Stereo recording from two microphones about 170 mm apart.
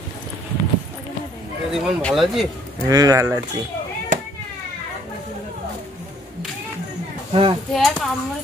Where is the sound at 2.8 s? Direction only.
20° right (ahead or behind).